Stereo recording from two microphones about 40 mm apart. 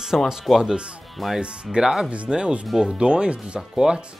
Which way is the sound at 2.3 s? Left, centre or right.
Right.